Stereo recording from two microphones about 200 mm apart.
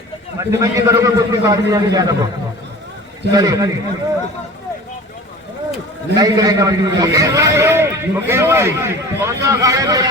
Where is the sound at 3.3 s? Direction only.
15° right (ahead or behind).